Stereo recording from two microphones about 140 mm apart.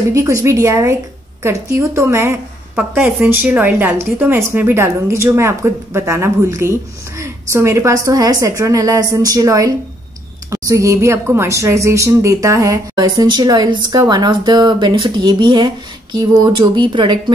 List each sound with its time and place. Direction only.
0.1 s a woman's voice: 25° right (ahead or behind)